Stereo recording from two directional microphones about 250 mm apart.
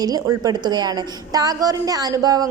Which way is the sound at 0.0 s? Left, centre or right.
Centre.